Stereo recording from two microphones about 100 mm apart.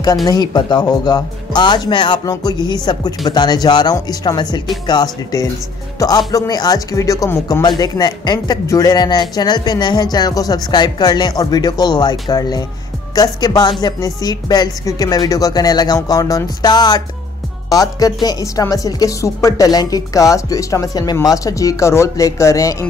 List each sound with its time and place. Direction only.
0.0 s speech: 40° left (ahead or behind)
7.6 s speech: 45° left (ahead or behind)